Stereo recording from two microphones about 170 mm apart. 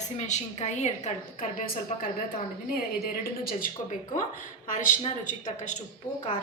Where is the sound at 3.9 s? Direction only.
50° left (ahead or behind).